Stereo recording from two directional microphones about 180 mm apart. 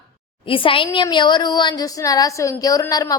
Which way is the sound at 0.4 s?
30° left (ahead or behind).